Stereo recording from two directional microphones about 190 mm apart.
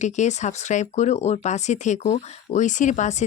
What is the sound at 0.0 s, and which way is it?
Speech, 35° left (ahead or behind).